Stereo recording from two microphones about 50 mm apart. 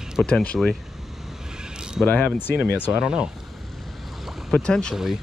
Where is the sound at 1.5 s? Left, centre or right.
Centre.